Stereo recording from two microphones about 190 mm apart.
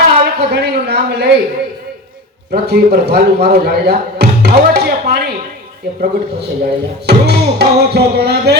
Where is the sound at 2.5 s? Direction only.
55° right (ahead or behind).